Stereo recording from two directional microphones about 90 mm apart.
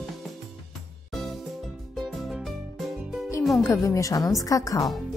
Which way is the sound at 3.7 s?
35° left (ahead or behind).